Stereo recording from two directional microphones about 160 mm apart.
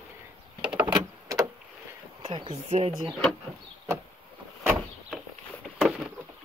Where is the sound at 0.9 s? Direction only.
25° right (ahead or behind).